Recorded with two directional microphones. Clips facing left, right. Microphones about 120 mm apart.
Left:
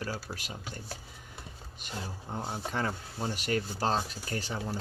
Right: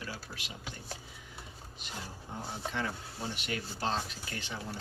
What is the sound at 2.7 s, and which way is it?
Speech, 40° left (ahead or behind).